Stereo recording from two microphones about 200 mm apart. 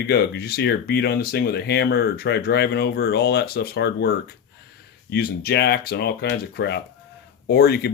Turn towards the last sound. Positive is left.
turn(degrees=55)  # may be behind; listen again after turning